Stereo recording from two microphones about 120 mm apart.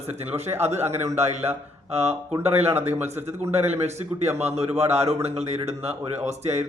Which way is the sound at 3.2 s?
65° right (ahead or behind).